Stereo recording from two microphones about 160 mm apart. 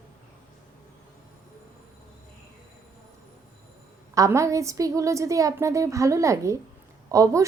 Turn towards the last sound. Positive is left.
turn(degrees=-20)  # may be behind; listen again after turning